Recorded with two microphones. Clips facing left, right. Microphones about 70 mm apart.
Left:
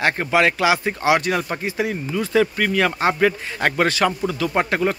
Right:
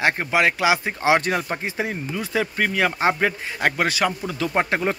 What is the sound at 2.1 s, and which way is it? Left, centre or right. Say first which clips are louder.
Speech: left 7 dB; centre.